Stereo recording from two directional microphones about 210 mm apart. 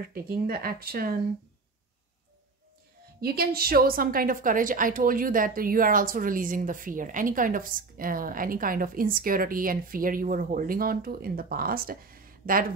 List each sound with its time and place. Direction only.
0.1 s speech: 45° right (ahead or behind)
3.2 s a woman's voice: 45° right (ahead or behind)